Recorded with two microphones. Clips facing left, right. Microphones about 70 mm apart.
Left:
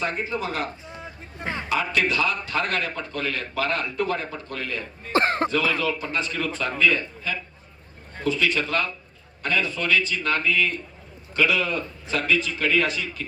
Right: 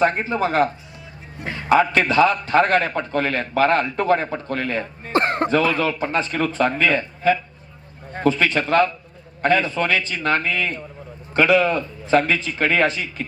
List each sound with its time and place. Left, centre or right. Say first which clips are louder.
0.0 s a man's voice: right 8 dB; right
1.4 s a man's voice: even; left
1.7 s a man's voice: right 8 dB; right
5.1 s speech: right 2 dB; centre
5.5 s a man's voice: right 5 dB; right